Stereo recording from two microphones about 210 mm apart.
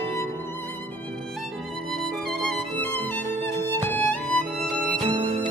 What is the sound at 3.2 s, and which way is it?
Music, 35° right (ahead or behind).